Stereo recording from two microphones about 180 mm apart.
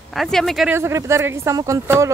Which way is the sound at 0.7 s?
15° right (ahead or behind).